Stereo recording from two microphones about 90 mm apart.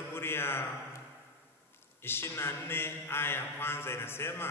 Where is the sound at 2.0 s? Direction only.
25° left (ahead or behind).